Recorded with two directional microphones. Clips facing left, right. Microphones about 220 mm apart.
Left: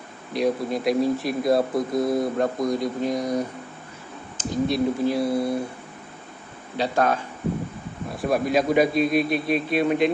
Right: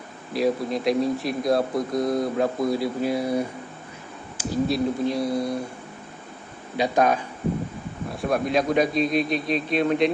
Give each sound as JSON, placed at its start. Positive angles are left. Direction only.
{"t": 0.3, "sound": "speech", "side_deg": 0}
{"t": 6.7, "sound": "speech", "side_deg": -15}
{"t": 8.1, "sound": "speech", "side_deg": 0}